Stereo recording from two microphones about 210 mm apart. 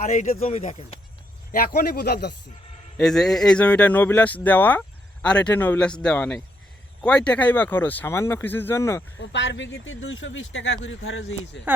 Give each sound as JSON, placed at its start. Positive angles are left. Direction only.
{"t": 0.0, "sound": "speech", "side_deg": 35}
{"t": 1.5, "sound": "a man's voice", "side_deg": 45}
{"t": 3.0, "sound": "speech", "side_deg": 0}
{"t": 9.1, "sound": "speech", "side_deg": 60}